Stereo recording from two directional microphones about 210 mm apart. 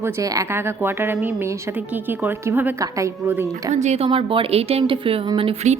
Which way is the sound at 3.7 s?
30° right (ahead or behind).